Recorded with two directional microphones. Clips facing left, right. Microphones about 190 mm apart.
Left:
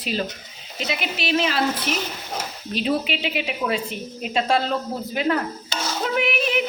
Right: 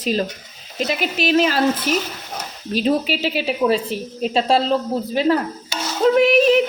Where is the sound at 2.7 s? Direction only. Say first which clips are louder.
Right 5 dB; 40° right (ahead or behind).